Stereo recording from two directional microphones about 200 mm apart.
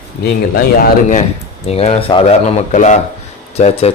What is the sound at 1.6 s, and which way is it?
Speech, 35° left (ahead or behind).